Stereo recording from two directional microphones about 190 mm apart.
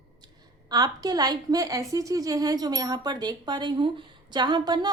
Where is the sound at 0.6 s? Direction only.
20° right (ahead or behind).